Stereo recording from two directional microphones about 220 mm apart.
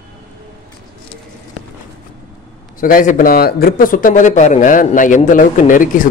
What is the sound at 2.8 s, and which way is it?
A man's voice, 40° left (ahead or behind).